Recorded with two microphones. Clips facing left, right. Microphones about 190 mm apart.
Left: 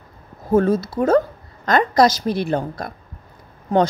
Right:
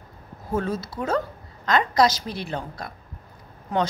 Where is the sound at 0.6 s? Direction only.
50° left (ahead or behind).